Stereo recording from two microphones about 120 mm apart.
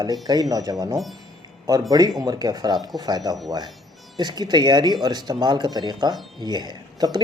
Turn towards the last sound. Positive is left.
turn(degrees=-35)  # may be behind; listen again after turning